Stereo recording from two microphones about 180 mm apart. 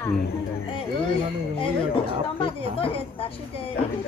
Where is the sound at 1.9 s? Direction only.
30° left (ahead or behind).